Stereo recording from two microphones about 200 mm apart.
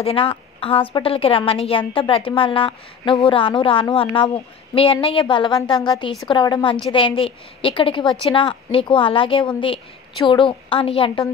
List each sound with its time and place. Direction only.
0.0 s a woman's voice: 25° left (ahead or behind)